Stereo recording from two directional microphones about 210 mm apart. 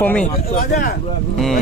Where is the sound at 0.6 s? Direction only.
40° left (ahead or behind).